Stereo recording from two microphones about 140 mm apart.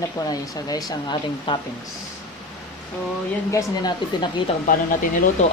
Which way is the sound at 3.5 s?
30° left (ahead or behind).